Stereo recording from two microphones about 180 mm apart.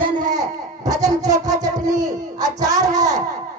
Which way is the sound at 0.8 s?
20° right (ahead or behind).